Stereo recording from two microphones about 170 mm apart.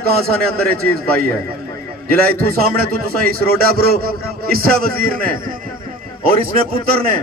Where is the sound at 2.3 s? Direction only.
60° right (ahead or behind).